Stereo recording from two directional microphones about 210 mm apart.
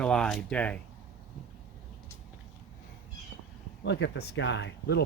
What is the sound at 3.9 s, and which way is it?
Speech, 60° left (ahead or behind).